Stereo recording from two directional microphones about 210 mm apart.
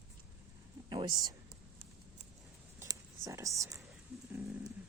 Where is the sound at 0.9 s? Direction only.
20° right (ahead or behind).